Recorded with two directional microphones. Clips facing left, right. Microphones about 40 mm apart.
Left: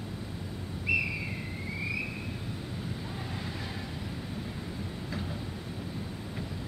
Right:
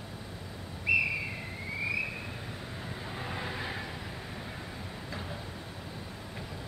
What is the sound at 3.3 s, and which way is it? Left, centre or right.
Vehicle, right.